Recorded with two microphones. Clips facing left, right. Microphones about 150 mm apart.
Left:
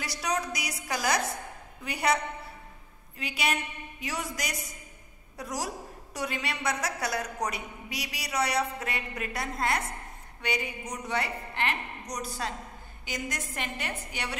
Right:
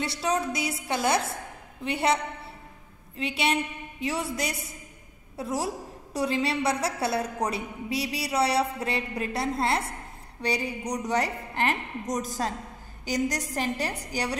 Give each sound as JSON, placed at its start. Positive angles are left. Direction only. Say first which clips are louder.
{"t": 0.0, "sound": "a woman's voice", "louder": "right 4 dB", "side_deg": -25}
{"t": 3.2, "sound": "a woman's voice", "louder": "right 4 dB", "side_deg": -30}